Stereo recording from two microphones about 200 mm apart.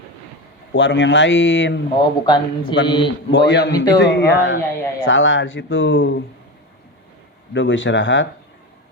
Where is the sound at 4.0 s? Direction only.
65° left (ahead or behind).